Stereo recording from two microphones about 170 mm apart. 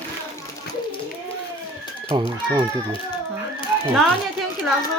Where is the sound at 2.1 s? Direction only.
25° right (ahead or behind).